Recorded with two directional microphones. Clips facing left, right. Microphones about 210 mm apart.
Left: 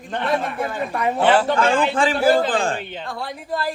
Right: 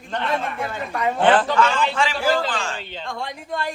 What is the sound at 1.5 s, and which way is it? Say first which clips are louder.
A man's voice: left 2 dB; 50° left (ahead or behind).